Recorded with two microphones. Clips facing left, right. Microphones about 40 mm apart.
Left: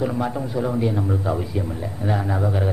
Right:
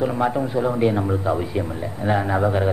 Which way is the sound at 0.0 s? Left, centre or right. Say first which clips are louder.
Right 3 dB; centre.